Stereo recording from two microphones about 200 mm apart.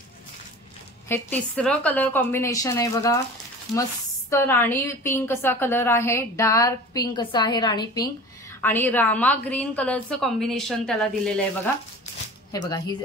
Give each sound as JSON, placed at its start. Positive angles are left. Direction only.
{"t": 1.0, "sound": "a woman's voice", "side_deg": 10}
{"t": 4.3, "sound": "a woman's voice", "side_deg": 10}
{"t": 12.5, "sound": "speech", "side_deg": 20}